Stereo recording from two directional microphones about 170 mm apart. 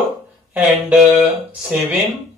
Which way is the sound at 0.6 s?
5° right (ahead or behind).